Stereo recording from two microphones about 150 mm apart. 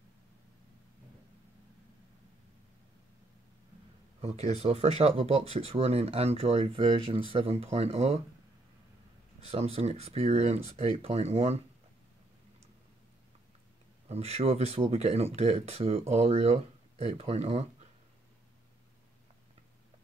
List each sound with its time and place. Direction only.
4.2 s speech: 45° right (ahead or behind)
9.4 s speech: 45° right (ahead or behind)
14.0 s speech: 45° right (ahead or behind)